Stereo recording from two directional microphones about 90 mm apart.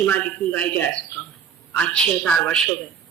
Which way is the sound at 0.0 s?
15° left (ahead or behind).